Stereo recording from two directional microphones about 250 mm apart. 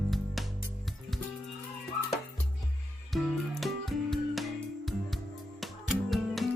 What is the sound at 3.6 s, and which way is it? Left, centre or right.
Music, centre.